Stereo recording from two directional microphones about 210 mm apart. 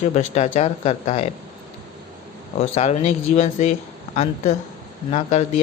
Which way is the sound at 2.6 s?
30° left (ahead or behind).